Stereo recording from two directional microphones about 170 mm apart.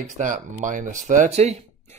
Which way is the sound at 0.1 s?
45° right (ahead or behind).